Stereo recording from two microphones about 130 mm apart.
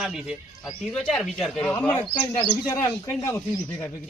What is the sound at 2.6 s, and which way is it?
Speech, 25° left (ahead or behind).